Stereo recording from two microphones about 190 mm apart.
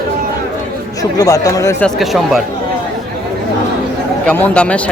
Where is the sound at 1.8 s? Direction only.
Centre (ahead or behind).